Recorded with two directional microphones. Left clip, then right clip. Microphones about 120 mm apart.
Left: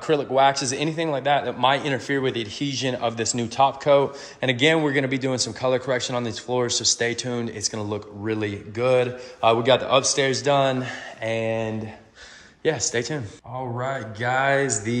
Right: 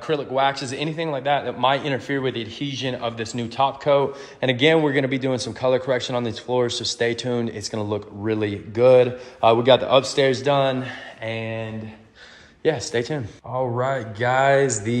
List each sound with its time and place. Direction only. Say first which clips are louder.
0.0 s a man's voice: left 2 dB; 55° left (ahead or behind); by 2.7 s 35° left (ahead or behind)
2.7 s a man's voice: left 2 dB; 50° left (ahead or behind)
12.6 s a man's voice: right 2 dB; 30° left (ahead or behind)